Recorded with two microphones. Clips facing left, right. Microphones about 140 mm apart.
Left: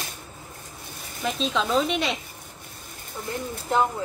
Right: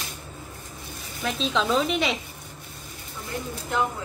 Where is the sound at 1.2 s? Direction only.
5° left (ahead or behind).